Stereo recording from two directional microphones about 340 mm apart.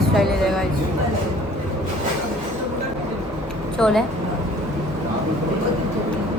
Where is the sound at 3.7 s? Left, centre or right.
Centre.